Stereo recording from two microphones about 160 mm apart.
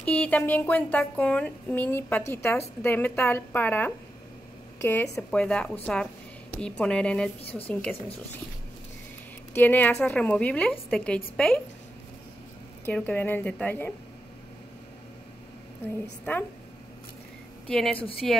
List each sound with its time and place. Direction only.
0.0 s a woman's voice: 10° left (ahead or behind)
7.4 s speech: 40° left (ahead or behind)
9.5 s a woman's voice: 10° left (ahead or behind)
12.8 s a woman's voice: 10° left (ahead or behind)
16.3 s a woman's voice: 10° left (ahead or behind)
17.6 s a woman's voice: centre (ahead or behind)